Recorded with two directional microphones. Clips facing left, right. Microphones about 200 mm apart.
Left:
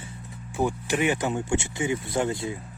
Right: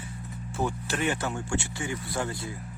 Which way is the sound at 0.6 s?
15° left (ahead or behind).